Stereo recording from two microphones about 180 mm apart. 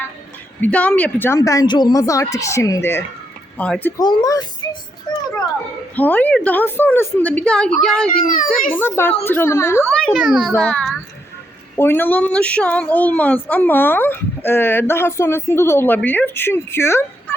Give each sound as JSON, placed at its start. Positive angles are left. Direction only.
{"t": 0.6, "sound": "a woman's voice", "side_deg": 10}
{"t": 4.0, "sound": "speech", "side_deg": 20}
{"t": 6.0, "sound": "a woman's voice", "side_deg": 10}
{"t": 8.2, "sound": "a child's voice", "side_deg": 50}
{"t": 8.7, "sound": "a woman's voice", "side_deg": 10}
{"t": 10.1, "sound": "a child's voice", "side_deg": 0}